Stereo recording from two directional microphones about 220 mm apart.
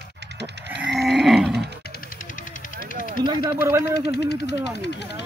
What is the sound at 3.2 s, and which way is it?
Speech, 20° right (ahead or behind).